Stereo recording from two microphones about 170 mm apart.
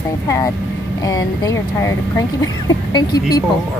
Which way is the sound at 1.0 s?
20° left (ahead or behind).